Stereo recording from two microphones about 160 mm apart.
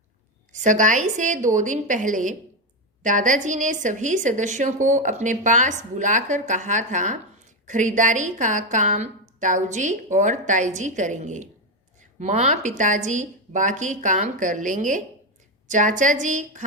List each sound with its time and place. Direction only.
0.5 s a woman's voice: 50° right (ahead or behind)